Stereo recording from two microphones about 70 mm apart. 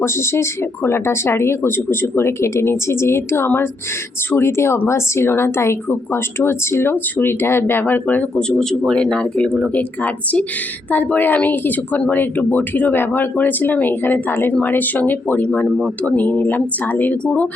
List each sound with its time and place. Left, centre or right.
0.0 s speech: left
8.4 s speech: centre